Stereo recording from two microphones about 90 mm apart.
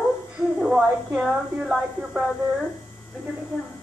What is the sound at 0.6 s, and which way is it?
A woman's voice, 5° right (ahead or behind).